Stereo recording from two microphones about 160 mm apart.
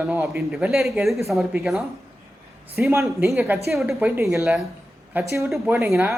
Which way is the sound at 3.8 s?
Centre (ahead or behind).